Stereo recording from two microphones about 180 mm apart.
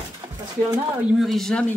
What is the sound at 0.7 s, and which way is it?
Speech, centre (ahead or behind).